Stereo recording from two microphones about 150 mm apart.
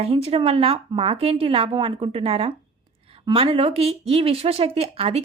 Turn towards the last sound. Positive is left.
turn(degrees=-40)  # may be behind; listen again after turning